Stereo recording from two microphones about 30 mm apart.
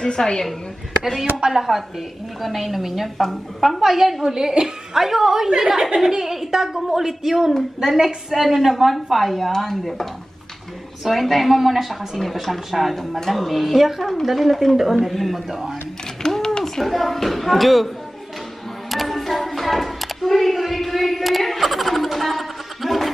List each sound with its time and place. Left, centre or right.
0.0 s a woman's voice: left
1.5 s a woman's voice: centre
4.2 s a woman's voice: centre
11.1 s a woman's voice: centre
16.2 s a sound: centre
16.6 s a woman's voice: centre
18.9 s music: centre